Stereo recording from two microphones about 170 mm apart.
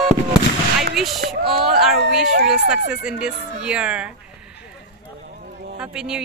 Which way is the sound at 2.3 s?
75° right (ahead or behind).